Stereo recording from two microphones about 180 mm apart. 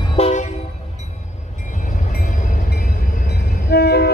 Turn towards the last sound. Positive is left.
turn(degrees=65)  # may be behind; listen again after turning